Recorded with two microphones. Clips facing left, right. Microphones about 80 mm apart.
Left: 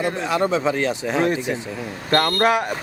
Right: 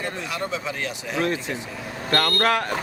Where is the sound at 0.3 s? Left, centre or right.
Left.